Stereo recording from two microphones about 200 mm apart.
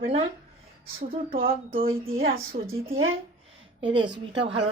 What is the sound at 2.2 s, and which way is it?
Speech, 50° right (ahead or behind).